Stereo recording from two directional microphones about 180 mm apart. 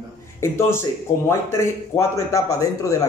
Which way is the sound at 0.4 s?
15° left (ahead or behind).